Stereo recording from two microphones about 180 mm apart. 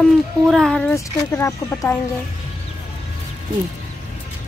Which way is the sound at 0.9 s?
15° left (ahead or behind).